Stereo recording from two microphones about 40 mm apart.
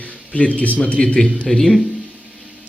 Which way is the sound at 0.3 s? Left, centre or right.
Left.